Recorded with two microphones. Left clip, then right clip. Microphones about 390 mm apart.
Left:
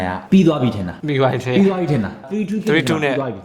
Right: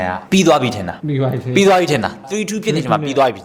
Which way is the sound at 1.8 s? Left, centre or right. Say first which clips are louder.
Right 6 dB; right.